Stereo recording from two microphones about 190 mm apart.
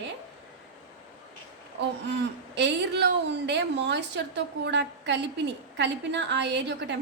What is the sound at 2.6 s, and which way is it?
A woman's voice, 65° right (ahead or behind).